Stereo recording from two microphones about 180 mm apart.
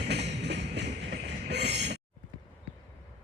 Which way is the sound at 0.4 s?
70° right (ahead or behind).